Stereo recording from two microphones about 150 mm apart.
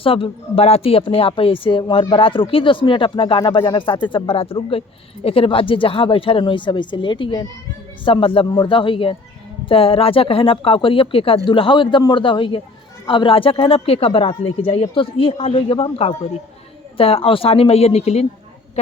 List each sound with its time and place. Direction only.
0.0 s a woman's voice: 40° left (ahead or behind)